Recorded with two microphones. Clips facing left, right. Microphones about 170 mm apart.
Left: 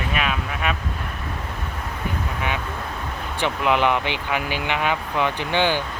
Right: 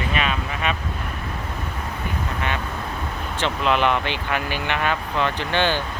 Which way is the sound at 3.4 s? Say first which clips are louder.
Even; 15° left (ahead or behind).